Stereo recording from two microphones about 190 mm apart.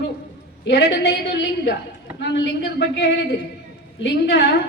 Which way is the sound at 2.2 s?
65° left (ahead or behind).